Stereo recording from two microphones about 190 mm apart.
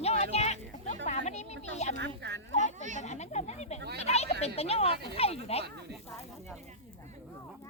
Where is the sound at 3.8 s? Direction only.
65° right (ahead or behind).